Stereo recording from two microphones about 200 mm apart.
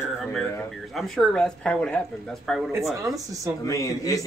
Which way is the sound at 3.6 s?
15° left (ahead or behind).